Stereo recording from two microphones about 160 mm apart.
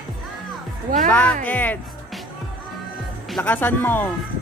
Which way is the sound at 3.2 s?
5° left (ahead or behind).